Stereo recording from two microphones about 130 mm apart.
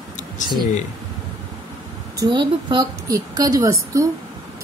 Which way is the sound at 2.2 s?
35° right (ahead or behind).